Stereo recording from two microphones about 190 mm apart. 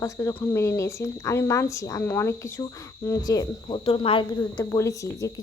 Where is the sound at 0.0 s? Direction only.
15° left (ahead or behind).